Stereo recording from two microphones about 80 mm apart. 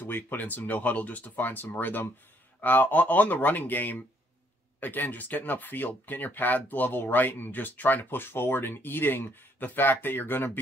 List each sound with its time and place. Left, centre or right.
0.0 s speech: left